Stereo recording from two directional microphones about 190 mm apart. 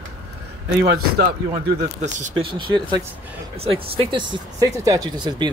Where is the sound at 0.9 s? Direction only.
55° right (ahead or behind).